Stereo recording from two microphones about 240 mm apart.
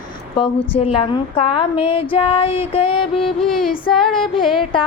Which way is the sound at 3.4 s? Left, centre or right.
Centre.